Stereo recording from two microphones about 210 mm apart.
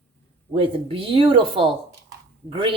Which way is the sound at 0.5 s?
25° right (ahead or behind).